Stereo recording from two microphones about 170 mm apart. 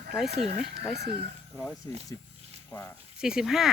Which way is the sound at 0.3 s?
40° right (ahead or behind).